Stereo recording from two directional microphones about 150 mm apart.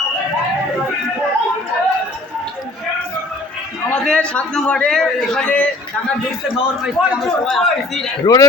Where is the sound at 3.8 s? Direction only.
5° left (ahead or behind).